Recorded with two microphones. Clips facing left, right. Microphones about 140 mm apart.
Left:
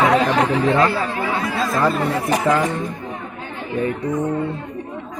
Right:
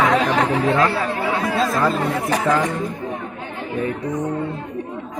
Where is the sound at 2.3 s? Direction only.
15° left (ahead or behind).